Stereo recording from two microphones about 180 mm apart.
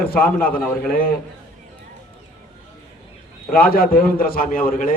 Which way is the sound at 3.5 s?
55° left (ahead or behind).